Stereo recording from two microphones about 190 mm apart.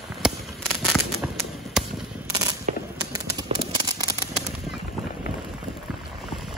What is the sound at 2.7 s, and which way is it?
Fireworks, 40° right (ahead or behind).